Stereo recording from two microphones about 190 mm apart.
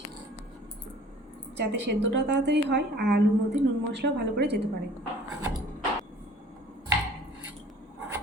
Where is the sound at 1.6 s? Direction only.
65° right (ahead or behind).